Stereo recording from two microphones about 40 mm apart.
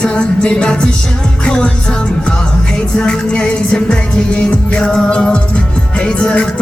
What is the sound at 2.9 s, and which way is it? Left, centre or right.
Music, left.